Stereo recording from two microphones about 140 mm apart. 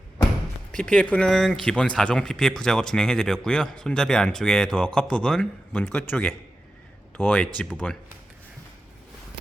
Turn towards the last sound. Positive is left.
turn(degrees=5)  # may be behind; listen again after turning